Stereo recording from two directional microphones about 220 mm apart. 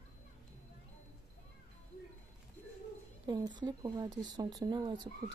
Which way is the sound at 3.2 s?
20° right (ahead or behind).